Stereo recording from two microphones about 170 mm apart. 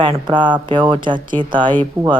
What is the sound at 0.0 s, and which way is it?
A woman's voice, 30° right (ahead or behind).